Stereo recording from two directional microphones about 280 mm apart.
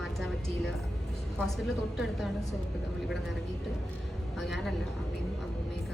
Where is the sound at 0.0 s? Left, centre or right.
Centre.